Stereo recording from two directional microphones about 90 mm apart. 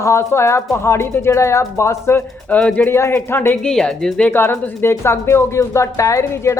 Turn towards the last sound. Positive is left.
turn(degrees=35)  # may be behind; listen again after turning